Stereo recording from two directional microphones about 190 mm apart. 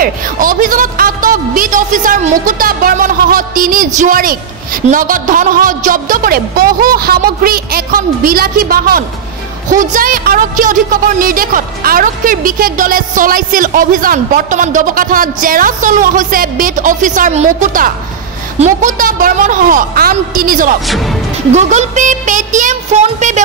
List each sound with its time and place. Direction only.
0.0 s a woman's voice: 45° right (ahead or behind)
20.8 s speech: centre (ahead or behind)
21.5 s speech: 40° right (ahead or behind)